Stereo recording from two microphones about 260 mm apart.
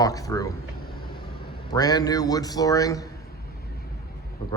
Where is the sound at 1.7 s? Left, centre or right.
Centre.